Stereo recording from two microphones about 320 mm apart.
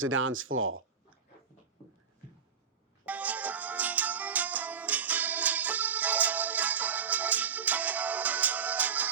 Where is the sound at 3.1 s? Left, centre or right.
Centre.